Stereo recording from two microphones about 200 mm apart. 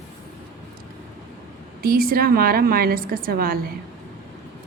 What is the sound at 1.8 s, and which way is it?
A woman's voice, 45° right (ahead or behind).